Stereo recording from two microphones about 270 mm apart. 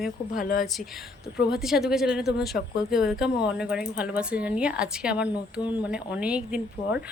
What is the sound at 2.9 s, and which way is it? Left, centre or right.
Speech, centre.